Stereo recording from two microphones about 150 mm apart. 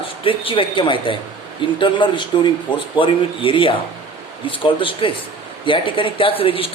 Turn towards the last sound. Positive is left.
turn(degrees=40)  # may be behind; listen again after turning